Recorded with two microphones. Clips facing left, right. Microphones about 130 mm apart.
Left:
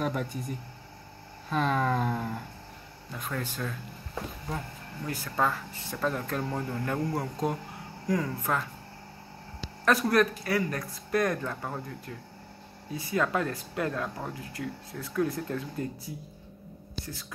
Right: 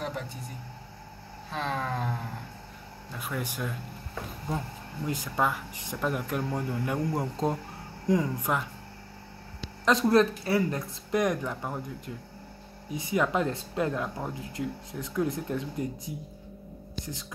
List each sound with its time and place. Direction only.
0.0 s speech: 55° left (ahead or behind)
1.5 s a sound: 55° left (ahead or behind)
3.2 s speech: 10° right (ahead or behind)
5.0 s speech: 15° right (ahead or behind)
9.8 s speech: 25° right (ahead or behind)